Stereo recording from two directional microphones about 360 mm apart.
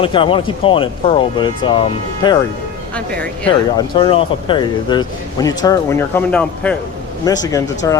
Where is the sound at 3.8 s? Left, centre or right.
Centre.